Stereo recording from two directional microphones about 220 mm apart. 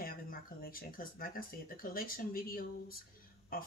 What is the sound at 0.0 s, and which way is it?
Speech, 40° left (ahead or behind).